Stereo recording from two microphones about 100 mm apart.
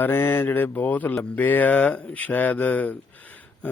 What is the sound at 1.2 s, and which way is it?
Speech, 15° left (ahead or behind).